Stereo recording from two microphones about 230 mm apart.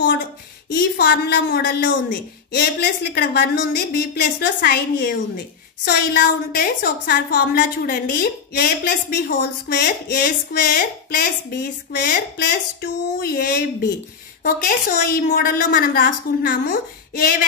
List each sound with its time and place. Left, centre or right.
0.7 s a woman's voice: left